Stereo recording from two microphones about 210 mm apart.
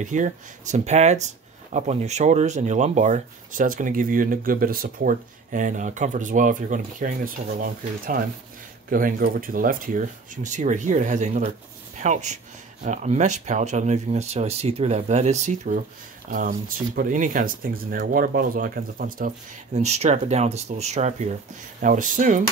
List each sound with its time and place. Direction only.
0.0 s speech: 35° right (ahead or behind)